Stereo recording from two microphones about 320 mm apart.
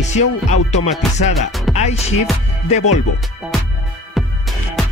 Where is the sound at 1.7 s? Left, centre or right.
Centre.